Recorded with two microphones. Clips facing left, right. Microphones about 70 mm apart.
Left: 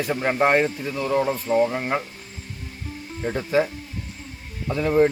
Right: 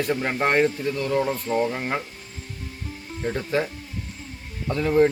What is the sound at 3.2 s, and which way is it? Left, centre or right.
Speech, centre.